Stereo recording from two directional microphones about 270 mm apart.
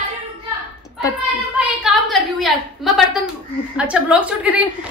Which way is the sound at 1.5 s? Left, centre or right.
Centre.